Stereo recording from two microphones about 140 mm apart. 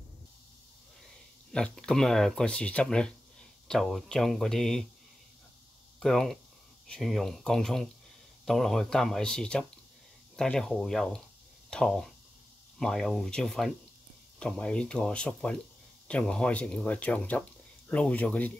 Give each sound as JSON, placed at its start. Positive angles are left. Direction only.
{"t": 1.5, "sound": "speech", "side_deg": 5}
{"t": 5.9, "sound": "speech", "side_deg": 5}